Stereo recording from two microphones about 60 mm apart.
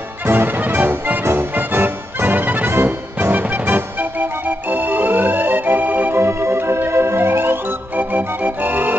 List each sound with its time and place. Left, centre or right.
0.3 s music: right
6.1 s music: right
8.6 s organ: right